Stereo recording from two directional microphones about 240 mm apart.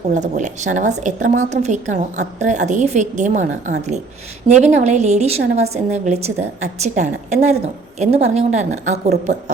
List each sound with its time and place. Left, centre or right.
0.1 s a woman's voice: right